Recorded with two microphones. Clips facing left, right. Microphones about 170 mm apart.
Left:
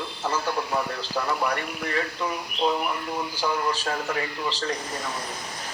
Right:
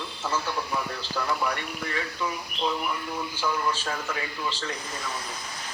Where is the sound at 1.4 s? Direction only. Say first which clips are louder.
Left 3 dB; 45° left (ahead or behind).